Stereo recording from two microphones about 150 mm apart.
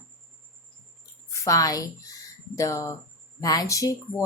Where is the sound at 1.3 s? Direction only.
20° left (ahead or behind).